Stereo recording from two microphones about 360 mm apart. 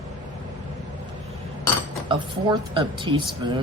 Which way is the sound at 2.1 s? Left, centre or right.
Centre.